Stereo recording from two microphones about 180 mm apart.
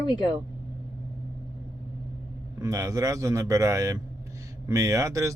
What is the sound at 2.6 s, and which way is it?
Speech, 15° right (ahead or behind).